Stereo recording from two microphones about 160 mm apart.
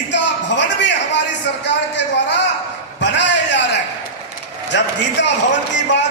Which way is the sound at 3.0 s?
90° left.